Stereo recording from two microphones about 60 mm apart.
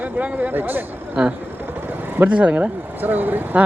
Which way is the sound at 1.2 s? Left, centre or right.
Centre.